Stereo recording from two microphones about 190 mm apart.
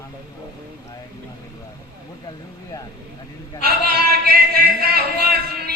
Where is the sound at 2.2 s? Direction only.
20° left (ahead or behind).